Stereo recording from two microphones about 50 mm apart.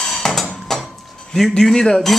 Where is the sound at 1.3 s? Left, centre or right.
Centre.